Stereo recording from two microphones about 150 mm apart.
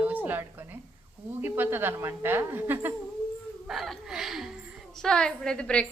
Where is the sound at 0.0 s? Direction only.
10° right (ahead or behind).